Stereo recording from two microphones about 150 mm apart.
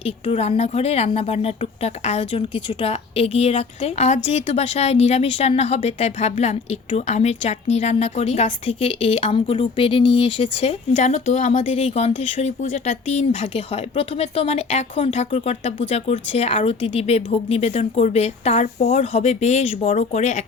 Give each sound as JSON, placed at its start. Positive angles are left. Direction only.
{"t": 0.0, "sound": "a woman's voice", "side_deg": 45}